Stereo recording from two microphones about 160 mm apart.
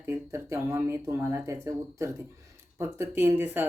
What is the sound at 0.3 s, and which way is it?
Speech, 15° right (ahead or behind).